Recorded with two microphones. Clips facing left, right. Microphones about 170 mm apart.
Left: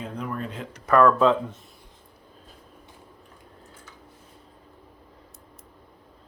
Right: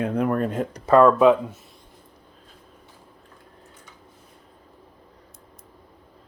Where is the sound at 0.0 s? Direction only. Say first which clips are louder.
Right 10 dB; 55° right (ahead or behind).